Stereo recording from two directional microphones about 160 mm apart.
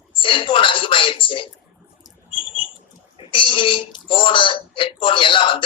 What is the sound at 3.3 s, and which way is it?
Speech, 35° left (ahead or behind).